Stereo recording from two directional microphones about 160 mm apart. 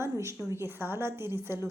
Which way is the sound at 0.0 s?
15° right (ahead or behind).